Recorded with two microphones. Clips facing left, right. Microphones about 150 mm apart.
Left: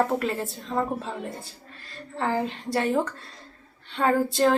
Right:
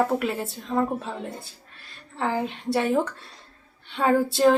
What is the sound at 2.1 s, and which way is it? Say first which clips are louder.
A woman's voice: even; 10° right (ahead or behind).